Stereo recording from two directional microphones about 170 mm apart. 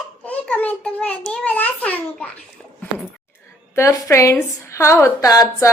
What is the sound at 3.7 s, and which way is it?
A woman's voice, 15° left (ahead or behind).